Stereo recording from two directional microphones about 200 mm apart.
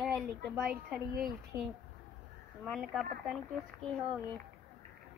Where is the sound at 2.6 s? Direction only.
Centre (ahead or behind).